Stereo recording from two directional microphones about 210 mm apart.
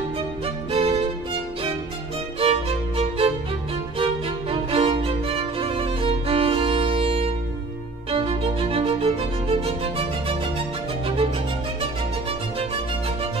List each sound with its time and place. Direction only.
0.7 s music: 30° right (ahead or behind)
2.4 s music: 30° right (ahead or behind)
11.8 s music: 25° right (ahead or behind)